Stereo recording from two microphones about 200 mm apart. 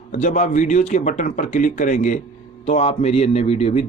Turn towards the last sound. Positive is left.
turn(degrees=30)  # may be behind; listen again after turning